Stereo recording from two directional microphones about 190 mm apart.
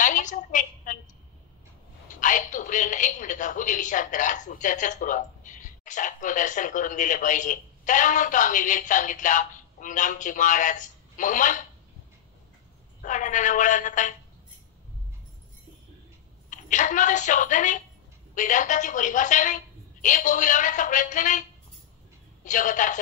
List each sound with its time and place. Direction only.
0.0 s a sound: 40° left (ahead or behind)
2.1 s a woman's voice: 40° left (ahead or behind)
13.0 s a woman's voice: 40° left (ahead or behind)
16.4 s a woman's voice: 40° left (ahead or behind)